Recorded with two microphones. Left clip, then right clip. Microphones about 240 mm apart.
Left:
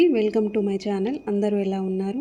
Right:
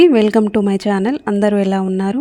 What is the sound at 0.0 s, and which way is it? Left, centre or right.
A woman's voice, right.